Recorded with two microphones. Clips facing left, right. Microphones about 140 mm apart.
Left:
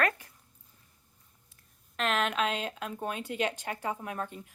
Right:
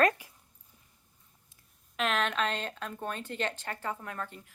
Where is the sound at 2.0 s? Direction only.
Centre (ahead or behind); by 4.5 s 20° left (ahead or behind).